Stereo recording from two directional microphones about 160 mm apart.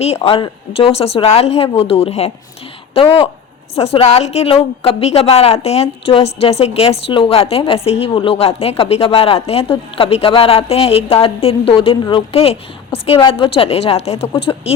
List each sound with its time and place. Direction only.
0.3 s a woman's voice: 35° left (ahead or behind)